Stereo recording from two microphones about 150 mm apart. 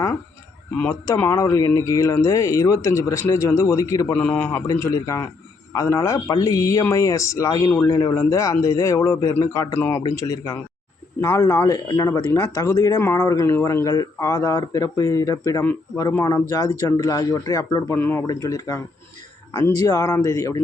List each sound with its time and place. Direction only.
0.8 s speech: 20° left (ahead or behind)